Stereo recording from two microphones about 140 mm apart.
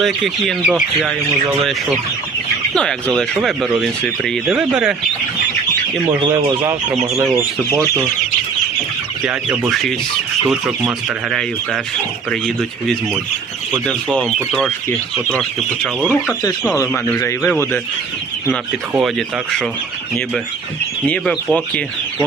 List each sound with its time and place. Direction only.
0.0 s speech: centre (ahead or behind)
2.7 s speech: 5° left (ahead or behind)
6.1 s speech: 25° right (ahead or behind)
9.2 s speech: 5° right (ahead or behind)
13.8 s speech: 5° left (ahead or behind)
15.4 s speech: centre (ahead or behind)
16.4 s speech: 20° left (ahead or behind)
18.9 s speech: centre (ahead or behind)
21.1 s speech: 10° left (ahead or behind)